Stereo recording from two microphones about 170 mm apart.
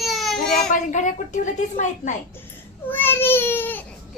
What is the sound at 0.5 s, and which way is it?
A woman's voice, 50° left (ahead or behind).